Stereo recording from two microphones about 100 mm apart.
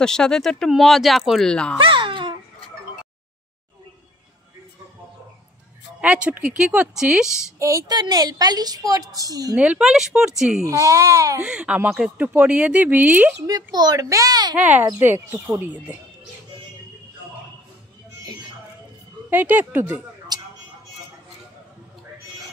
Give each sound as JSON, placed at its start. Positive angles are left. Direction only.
{"t": 0.0, "sound": "speech", "side_deg": 5}
{"t": 1.8, "sound": "music", "side_deg": -60}
{"t": 5.9, "sound": "speech", "side_deg": -10}
{"t": 7.5, "sound": "a woman's voice", "side_deg": -35}
{"t": 9.6, "sound": "speech", "side_deg": -10}
{"t": 10.6, "sound": "a woman's voice", "side_deg": -35}
{"t": 11.4, "sound": "speech", "side_deg": -10}
{"t": 13.5, "sound": "a woman's voice", "side_deg": -45}
{"t": 14.6, "sound": "speech", "side_deg": -15}
{"t": 19.3, "sound": "speech", "side_deg": -20}
{"t": 20.3, "sound": "a sound", "side_deg": -40}